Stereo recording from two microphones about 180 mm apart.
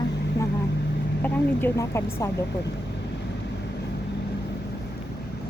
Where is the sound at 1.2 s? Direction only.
15° left (ahead or behind).